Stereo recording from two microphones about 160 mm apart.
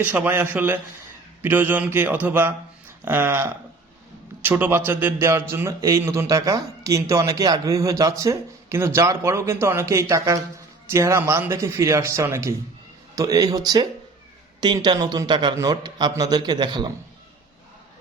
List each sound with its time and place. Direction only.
0.0 s a man's voice: 10° right (ahead or behind)
14.6 s speech: 30° right (ahead or behind)